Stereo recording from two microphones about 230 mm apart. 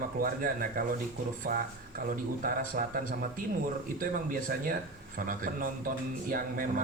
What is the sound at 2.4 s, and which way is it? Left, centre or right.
Speech, right.